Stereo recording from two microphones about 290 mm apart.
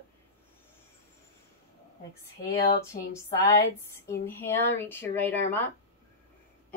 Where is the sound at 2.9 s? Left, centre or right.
Left.